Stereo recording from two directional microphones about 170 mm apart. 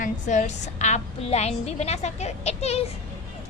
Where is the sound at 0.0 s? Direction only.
45° left (ahead or behind).